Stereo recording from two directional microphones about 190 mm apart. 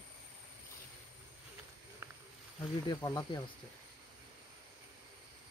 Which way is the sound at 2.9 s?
20° left (ahead or behind).